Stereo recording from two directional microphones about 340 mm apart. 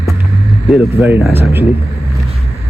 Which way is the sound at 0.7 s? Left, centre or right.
Centre.